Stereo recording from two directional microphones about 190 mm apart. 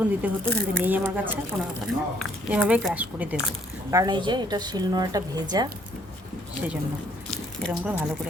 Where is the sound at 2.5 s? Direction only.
5° right (ahead or behind).